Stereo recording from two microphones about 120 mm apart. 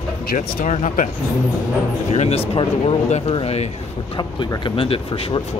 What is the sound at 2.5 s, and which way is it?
Speech, 50° left (ahead or behind).